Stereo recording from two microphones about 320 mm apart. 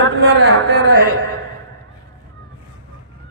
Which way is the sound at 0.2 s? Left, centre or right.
Right.